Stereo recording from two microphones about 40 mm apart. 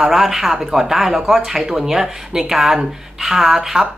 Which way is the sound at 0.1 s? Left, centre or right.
Centre.